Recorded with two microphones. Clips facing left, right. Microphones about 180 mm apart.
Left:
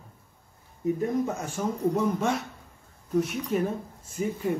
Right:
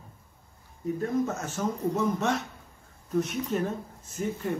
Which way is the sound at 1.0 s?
10° left (ahead or behind).